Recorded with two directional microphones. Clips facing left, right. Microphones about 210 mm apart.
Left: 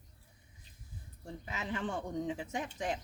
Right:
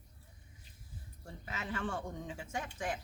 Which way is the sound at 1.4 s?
20° left (ahead or behind).